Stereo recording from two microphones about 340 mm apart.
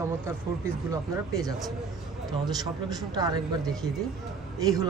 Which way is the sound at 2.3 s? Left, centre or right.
Centre.